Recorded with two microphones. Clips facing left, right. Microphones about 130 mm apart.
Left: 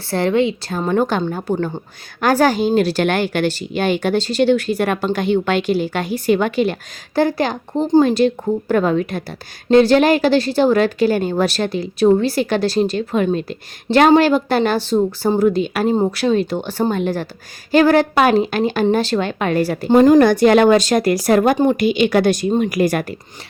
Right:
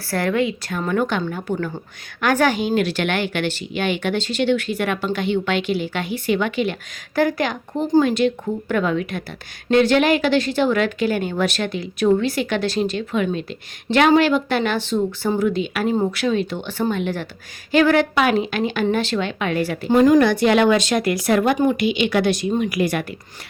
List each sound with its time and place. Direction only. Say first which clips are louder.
0.1 s a woman's voice: left 4 dB; 25° left (ahead or behind); by 23.0 s 45° left (ahead or behind)